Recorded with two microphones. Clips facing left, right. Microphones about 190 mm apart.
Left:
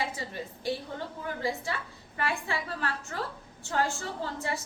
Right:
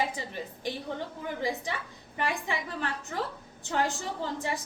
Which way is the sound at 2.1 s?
15° right (ahead or behind).